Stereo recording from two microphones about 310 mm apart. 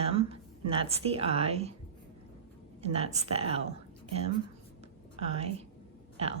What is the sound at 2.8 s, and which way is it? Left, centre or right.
Speech, centre.